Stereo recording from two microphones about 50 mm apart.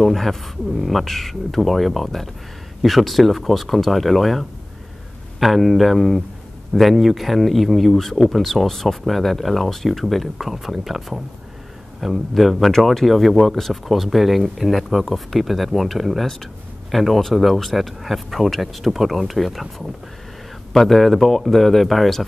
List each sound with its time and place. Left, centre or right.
0.0 s speech: centre